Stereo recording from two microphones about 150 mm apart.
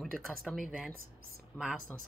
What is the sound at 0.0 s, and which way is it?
Speech, 5° left (ahead or behind).